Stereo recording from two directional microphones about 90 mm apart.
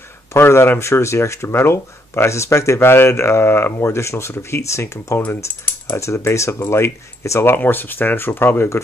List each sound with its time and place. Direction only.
0.3 s speech: 30° left (ahead or behind)
5.2 s speech: 20° left (ahead or behind)